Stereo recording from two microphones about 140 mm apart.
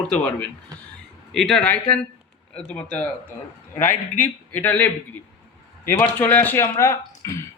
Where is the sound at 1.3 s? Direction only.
Centre (ahead or behind).